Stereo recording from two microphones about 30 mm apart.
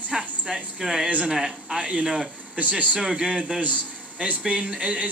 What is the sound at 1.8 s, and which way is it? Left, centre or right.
Speech, right.